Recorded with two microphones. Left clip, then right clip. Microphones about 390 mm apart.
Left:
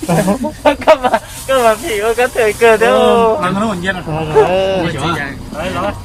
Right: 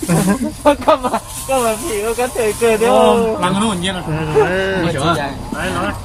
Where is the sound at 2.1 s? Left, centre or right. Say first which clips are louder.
Left 6 dB; centre.